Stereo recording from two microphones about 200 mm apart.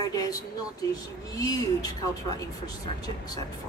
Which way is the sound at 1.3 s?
20° left (ahead or behind).